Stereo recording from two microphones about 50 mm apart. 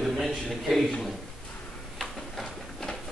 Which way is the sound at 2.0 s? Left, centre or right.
Centre.